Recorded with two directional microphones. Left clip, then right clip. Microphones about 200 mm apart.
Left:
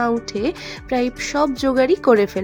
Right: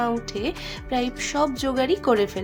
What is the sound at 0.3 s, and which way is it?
Speech, 30° left (ahead or behind).